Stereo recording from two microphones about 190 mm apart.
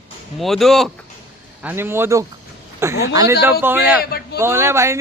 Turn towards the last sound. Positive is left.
turn(degrees=-15)  # may be behind; listen again after turning